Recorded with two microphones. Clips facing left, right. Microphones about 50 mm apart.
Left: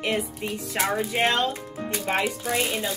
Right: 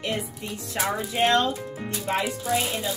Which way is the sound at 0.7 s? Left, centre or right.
Left.